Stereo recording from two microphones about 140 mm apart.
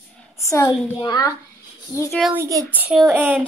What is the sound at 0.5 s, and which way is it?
Speech, 20° left (ahead or behind).